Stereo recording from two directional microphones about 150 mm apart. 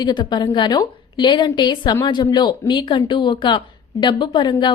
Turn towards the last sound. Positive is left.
turn(degrees=30)  # may be behind; listen again after turning